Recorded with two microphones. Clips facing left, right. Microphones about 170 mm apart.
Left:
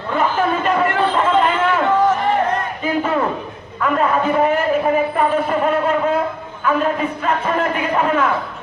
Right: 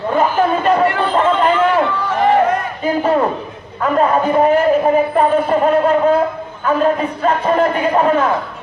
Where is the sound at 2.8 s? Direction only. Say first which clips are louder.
Right 5 dB; 35° right (ahead or behind).